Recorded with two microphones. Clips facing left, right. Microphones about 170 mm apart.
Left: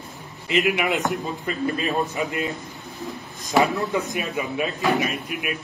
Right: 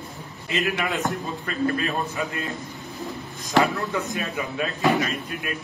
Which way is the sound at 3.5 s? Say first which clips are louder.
Left 1 dB; 20° left (ahead or behind).